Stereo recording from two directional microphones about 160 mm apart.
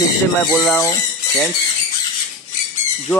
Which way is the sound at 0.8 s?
20° left (ahead or behind).